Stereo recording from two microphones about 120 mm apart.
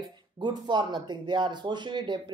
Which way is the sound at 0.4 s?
40° right (ahead or behind).